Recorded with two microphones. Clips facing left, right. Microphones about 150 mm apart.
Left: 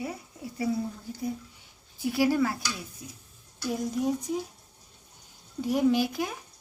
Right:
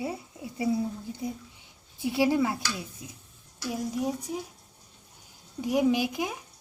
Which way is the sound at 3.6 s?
5° right (ahead or behind).